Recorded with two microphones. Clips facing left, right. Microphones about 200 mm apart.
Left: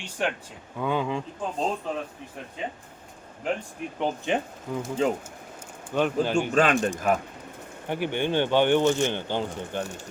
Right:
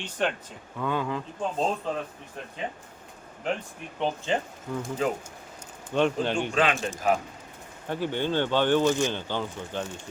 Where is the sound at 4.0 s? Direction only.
15° left (ahead or behind).